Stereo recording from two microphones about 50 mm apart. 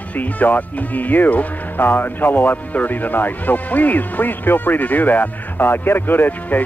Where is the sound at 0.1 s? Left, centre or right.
Left.